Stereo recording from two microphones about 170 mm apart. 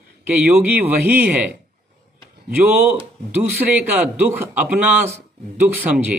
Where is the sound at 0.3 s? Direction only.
10° right (ahead or behind).